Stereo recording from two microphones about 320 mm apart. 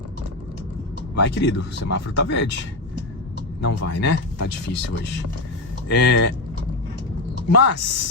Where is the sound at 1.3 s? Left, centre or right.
Left.